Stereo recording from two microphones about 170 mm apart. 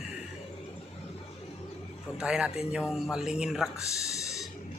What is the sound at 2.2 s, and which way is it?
Speech, 5° right (ahead or behind).